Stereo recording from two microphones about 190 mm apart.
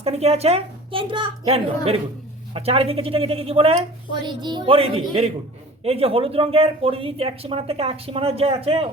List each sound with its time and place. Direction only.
0.0 s a woman's voice: 35° right (ahead or behind)